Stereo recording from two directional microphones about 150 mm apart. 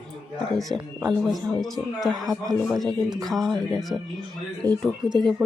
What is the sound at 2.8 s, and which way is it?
Speech, 25° right (ahead or behind).